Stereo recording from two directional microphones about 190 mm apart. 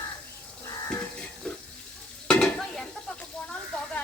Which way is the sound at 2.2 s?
5° left (ahead or behind).